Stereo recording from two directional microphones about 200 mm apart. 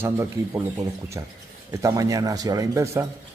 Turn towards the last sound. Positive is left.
turn(degrees=-15)  # may be behind; listen again after turning